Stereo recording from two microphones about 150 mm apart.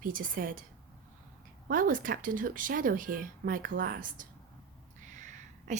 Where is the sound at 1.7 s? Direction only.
65° right (ahead or behind).